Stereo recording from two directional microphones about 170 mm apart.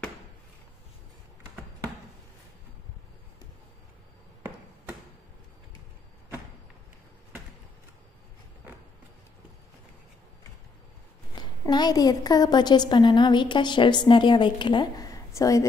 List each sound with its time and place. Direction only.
11.3 s a woman's voice: 25° left (ahead or behind)